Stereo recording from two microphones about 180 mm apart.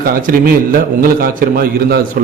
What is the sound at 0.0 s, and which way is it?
A man's voice, 50° right (ahead or behind).